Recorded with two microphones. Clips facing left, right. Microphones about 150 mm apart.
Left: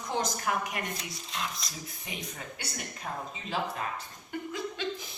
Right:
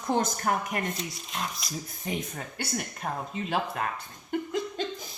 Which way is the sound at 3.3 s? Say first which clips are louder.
Right 4 dB; 55° right (ahead or behind).